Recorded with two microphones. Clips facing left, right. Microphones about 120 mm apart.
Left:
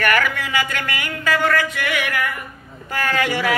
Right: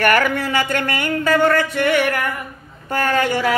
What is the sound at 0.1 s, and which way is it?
Speech, 40° right (ahead or behind).